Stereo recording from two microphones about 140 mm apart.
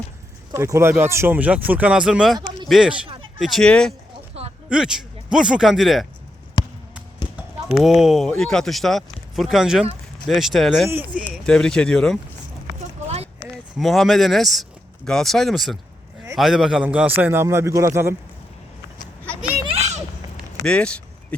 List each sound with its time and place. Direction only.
0.5 s speech: 20° right (ahead or behind); by 3.9 s 5° left (ahead or behind)
4.4 s a sound: 45° right (ahead or behind)
4.7 s speech: 5° right (ahead or behind)
7.8 s speech: 5° right (ahead or behind)
10.8 s speech: 10° right (ahead or behind)
11.4 s speech: 5° left (ahead or behind)
13.7 s speech: centre (ahead or behind); by 18.1 s 20° right (ahead or behind)
19.6 s children playing: 50° right (ahead or behind)
20.7 s speech: 5° left (ahead or behind)